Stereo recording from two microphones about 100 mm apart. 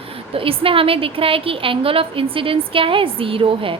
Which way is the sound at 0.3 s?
65° right (ahead or behind).